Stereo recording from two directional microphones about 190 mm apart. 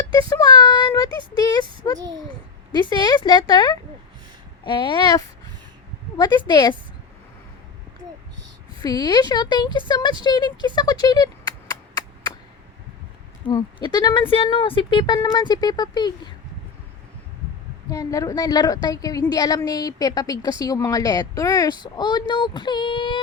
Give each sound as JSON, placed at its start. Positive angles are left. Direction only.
{"t": 0.1, "sound": "a woman's voice", "side_deg": 20}
{"t": 8.8, "sound": "a woman's voice", "side_deg": 20}
{"t": 11.0, "sound": "chop", "side_deg": 20}
{"t": 13.5, "sound": "a woman's voice", "side_deg": 25}
{"t": 17.8, "sound": "a woman's voice", "side_deg": 15}